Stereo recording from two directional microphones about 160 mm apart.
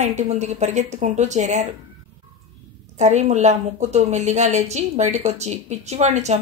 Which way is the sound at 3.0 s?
45° right (ahead or behind).